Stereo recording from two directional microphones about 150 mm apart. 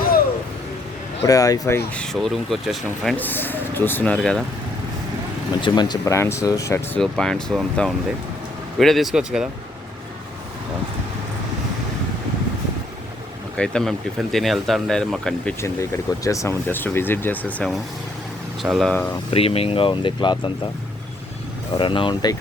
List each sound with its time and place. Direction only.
1.3 s speech: 25° left (ahead or behind)
2.0 s speech: centre (ahead or behind)
5.5 s speech: 30° left (ahead or behind)
7.0 s speech: 5° left (ahead or behind)
13.6 s speech: 5° left (ahead or behind)
15.6 s speech: 20° left (ahead or behind)
18.6 s speech: centre (ahead or behind)
19.3 s speech: 40° left (ahead or behind)
21.8 s speech: 35° left (ahead or behind)